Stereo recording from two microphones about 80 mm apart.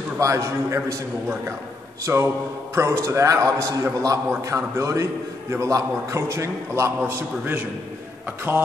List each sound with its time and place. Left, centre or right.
0.2 s a man's voice: right